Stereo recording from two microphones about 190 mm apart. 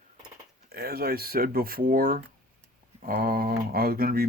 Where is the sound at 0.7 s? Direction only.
55° right (ahead or behind).